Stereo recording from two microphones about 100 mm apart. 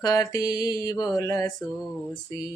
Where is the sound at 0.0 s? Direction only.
35° left (ahead or behind).